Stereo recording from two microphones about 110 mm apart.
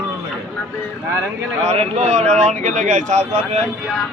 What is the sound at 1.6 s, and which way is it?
Speech, 90° right.